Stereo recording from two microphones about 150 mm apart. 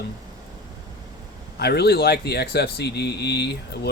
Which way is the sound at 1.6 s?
90° left.